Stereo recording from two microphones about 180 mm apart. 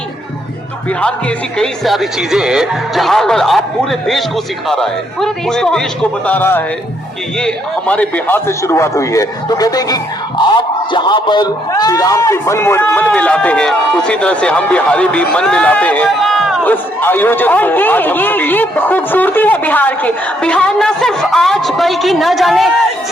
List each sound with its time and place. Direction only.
1.5 s speech: centre (ahead or behind)